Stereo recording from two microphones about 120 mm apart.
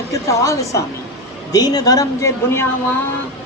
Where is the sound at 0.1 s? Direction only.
25° left (ahead or behind).